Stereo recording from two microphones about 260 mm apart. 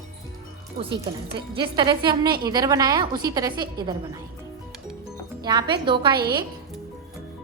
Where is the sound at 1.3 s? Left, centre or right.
Centre.